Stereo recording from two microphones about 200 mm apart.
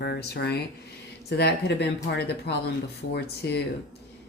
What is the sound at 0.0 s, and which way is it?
Speech, 55° left (ahead or behind).